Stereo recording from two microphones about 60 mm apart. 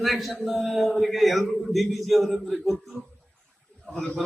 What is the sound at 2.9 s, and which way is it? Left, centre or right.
Speech, right.